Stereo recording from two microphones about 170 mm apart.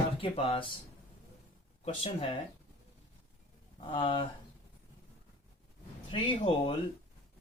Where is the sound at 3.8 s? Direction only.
30° left (ahead or behind).